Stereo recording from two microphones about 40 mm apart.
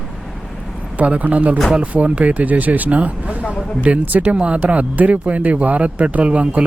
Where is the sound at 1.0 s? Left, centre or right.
Right.